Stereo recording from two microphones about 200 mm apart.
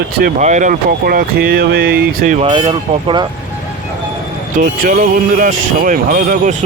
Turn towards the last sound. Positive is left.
turn(degrees=-45)  # may be behind; listen again after turning